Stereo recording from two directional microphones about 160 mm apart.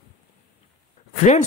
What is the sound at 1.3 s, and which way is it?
Speech, 45° left (ahead or behind).